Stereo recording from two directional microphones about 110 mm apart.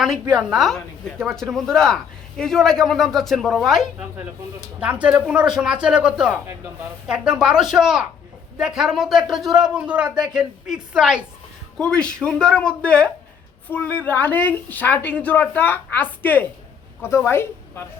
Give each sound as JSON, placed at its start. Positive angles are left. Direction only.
{"t": 0.0, "sound": "a man's voice", "side_deg": -5}
{"t": 4.8, "sound": "a man's voice", "side_deg": -10}
{"t": 11.8, "sound": "a woman's voice", "side_deg": 5}